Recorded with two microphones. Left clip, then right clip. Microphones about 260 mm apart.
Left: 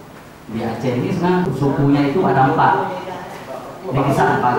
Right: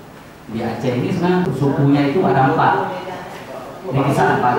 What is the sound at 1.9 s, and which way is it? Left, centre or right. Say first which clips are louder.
A man's voice: even; centre.